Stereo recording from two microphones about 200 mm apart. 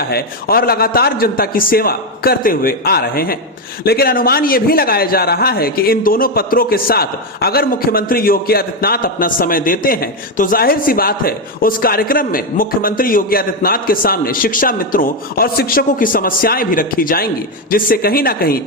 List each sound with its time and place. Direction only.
0.1 s a man's voice: 50° left (ahead or behind)